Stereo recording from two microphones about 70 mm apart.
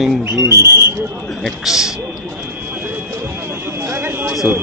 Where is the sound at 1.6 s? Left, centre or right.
Centre.